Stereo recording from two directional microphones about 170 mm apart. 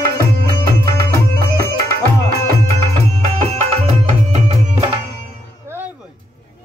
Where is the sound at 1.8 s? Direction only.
60° right (ahead or behind).